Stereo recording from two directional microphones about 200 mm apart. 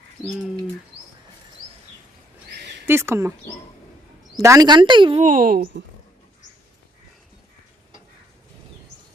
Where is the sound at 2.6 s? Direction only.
55° right (ahead or behind).